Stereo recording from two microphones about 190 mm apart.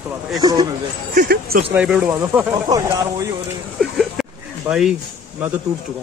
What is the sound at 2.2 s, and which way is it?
Speech, 20° right (ahead or behind).